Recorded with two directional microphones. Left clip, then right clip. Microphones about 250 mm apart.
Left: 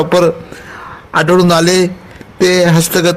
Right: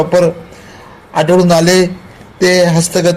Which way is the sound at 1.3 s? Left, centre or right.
Left.